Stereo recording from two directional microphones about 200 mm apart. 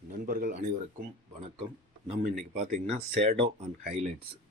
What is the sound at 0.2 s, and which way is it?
Speech, 45° right (ahead or behind).